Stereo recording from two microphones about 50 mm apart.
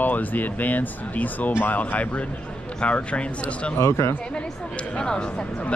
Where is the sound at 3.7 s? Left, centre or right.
Left.